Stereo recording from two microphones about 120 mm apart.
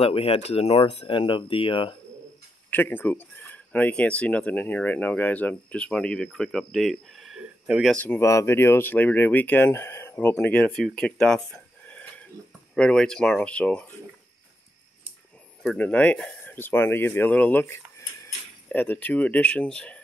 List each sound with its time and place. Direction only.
0.0 s speech: 55° left (ahead or behind)
2.7 s speech: 15° left (ahead or behind); by 7.9 s 5° right (ahead or behind)
7.9 s speech: 10° left (ahead or behind)
8.2 s speech: 25° left (ahead or behind)
15.6 s speech: 5° left (ahead or behind)